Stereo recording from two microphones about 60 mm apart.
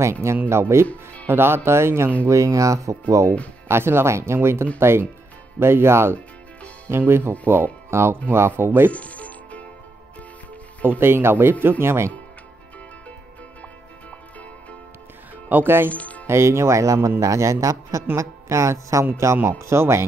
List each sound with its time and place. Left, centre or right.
0.0 s speech: right
0.8 s music: left
1.3 s speech: right
2.2 s speech: right
3.6 s speech: right
8.9 s music: left
10.8 s speech: right
15.4 s speech: right
15.9 s music: left
16.3 s speech: right
18.1 s speech: right
19.6 s speech: right